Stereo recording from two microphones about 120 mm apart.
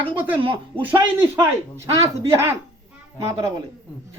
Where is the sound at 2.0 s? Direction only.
25° right (ahead or behind).